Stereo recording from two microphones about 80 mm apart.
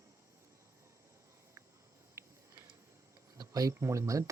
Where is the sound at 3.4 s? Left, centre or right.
Right.